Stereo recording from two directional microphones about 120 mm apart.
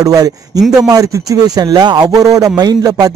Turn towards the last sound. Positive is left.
turn(degrees=-35)  # may be behind; listen again after turning